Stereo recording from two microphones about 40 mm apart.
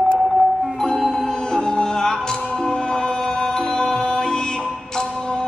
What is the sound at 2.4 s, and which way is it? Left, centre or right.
Music, left.